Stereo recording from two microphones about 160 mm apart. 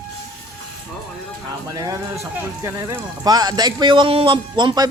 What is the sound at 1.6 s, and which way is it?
Speech, 20° right (ahead or behind).